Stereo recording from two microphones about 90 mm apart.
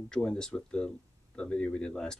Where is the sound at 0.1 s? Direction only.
10° left (ahead or behind).